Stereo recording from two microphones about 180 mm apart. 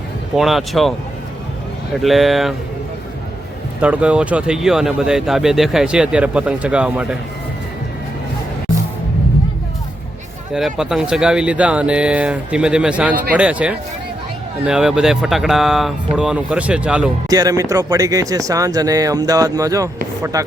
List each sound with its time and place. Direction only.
0.3 s speech: centre (ahead or behind)
3.8 s speech: 5° right (ahead or behind)
10.5 s speech: 5° right (ahead or behind)
17.2 s speech: 20° right (ahead or behind)